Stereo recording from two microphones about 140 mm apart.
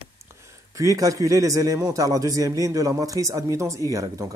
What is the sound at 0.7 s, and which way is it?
A man's voice, 25° right (ahead or behind).